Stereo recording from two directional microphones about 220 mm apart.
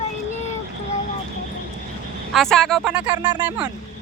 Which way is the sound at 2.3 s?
Centre (ahead or behind).